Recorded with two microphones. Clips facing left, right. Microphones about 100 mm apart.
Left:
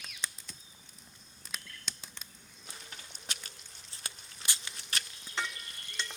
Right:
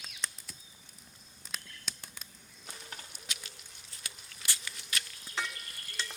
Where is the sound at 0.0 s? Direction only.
Centre (ahead or behind).